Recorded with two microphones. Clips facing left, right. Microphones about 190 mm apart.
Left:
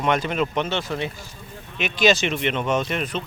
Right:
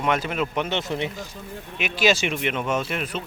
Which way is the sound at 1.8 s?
5° right (ahead or behind).